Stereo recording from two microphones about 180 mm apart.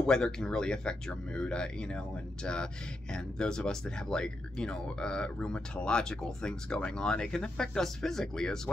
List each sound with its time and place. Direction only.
0.0 s speech: 5° left (ahead or behind)